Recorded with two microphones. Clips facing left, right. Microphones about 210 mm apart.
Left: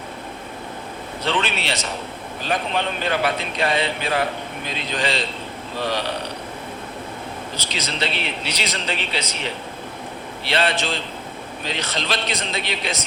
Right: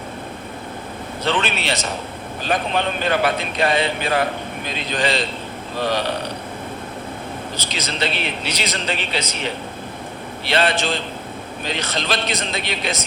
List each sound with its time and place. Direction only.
1.3 s speech: 50° right (ahead or behind)
7.6 s speech: 45° right (ahead or behind)
10.4 s speech: 45° right (ahead or behind)